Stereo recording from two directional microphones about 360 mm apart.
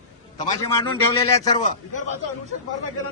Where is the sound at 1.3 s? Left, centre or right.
Centre.